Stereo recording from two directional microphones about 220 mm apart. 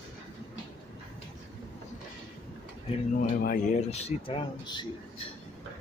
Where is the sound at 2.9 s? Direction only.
35° left (ahead or behind).